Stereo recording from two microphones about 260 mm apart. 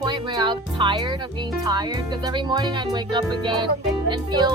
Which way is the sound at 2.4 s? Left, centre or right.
Centre.